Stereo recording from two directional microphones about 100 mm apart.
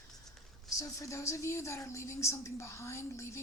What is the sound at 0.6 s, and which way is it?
A woman's voice, 35° left (ahead or behind).